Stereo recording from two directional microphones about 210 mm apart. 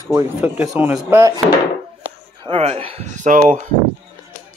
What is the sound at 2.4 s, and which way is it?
Speech, 30° right (ahead or behind).